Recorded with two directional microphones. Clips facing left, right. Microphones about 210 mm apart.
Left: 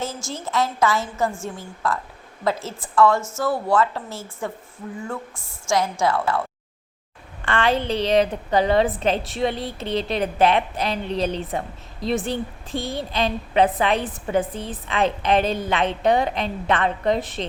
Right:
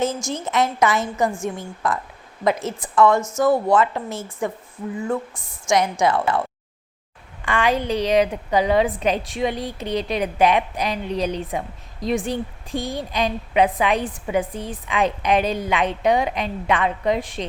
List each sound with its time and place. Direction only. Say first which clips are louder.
0.0 s a woman's voice: right 6 dB; 20° right (ahead or behind)
7.4 s a woman's voice: even; 15° right (ahead or behind)